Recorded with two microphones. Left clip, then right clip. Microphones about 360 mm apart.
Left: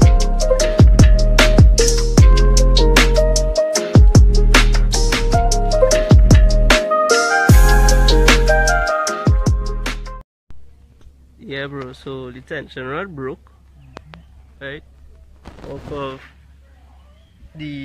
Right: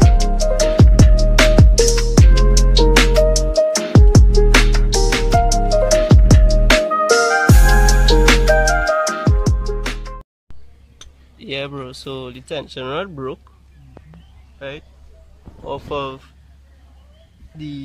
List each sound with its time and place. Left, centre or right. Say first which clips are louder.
0.0 s music: right 1 dB; centre
11.4 s speech: right 1 dB; centre
14.6 s speech: even; centre
17.6 s speech: left 1 dB; centre